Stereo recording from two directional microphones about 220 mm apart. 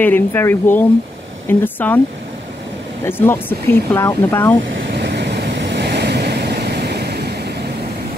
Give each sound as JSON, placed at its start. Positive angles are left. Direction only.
{"t": 0.0, "sound": "speech", "side_deg": 10}
{"t": 3.1, "sound": "speech", "side_deg": 10}
{"t": 4.7, "sound": "vehicle", "side_deg": -50}